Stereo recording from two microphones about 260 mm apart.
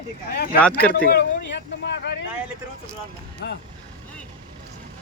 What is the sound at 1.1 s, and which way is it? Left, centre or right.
Speech, left.